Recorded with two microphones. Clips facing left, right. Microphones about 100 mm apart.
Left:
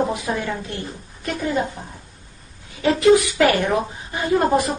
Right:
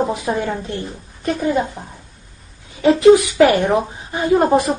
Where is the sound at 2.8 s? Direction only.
25° right (ahead or behind).